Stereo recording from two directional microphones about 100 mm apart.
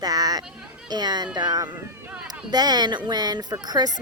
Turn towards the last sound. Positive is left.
turn(degrees=-40)  # may be behind; listen again after turning